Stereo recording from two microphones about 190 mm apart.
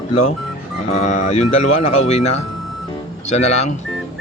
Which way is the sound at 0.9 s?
35° left (ahead or behind).